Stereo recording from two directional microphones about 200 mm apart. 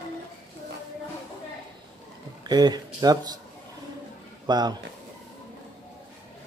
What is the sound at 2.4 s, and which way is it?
Speech, 20° right (ahead or behind).